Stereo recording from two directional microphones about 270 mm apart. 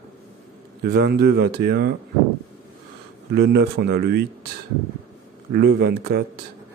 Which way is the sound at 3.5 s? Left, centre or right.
Right.